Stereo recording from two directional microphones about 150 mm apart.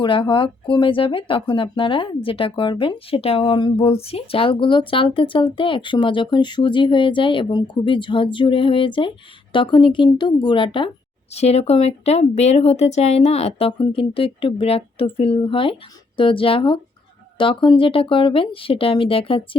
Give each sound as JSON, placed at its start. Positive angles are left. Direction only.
{"t": 0.0, "sound": "speech", "side_deg": 35}
{"t": 11.3, "sound": "speech", "side_deg": 45}